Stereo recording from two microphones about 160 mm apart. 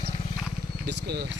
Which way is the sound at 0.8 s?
90° right.